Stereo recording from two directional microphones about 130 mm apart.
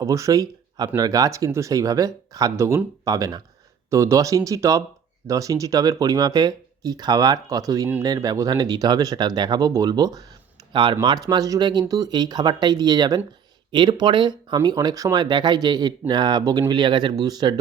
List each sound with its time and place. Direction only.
0.0 s speech: 25° right (ahead or behind)